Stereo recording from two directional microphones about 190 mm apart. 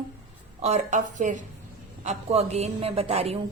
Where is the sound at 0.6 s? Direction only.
40° right (ahead or behind).